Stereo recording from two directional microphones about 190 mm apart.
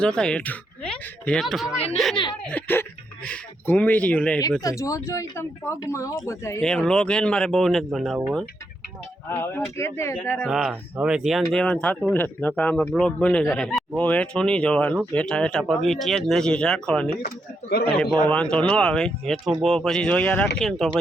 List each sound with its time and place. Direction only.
0.0 s speech: 5° left (ahead or behind)
6.6 s speech: 5° left (ahead or behind)
9.3 s speech: 10° left (ahead or behind)
10.5 s speech: centre (ahead or behind)
17.2 s speech: 55° left (ahead or behind)
18.5 s speech: 5° left (ahead or behind)